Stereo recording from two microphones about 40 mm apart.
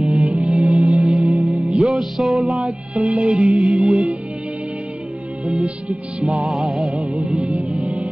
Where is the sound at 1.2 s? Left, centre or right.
Right.